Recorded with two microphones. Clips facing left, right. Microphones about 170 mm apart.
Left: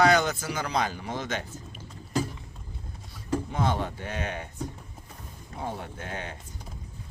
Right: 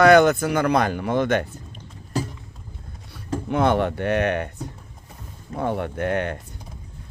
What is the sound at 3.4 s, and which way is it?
Speech, 65° right (ahead or behind).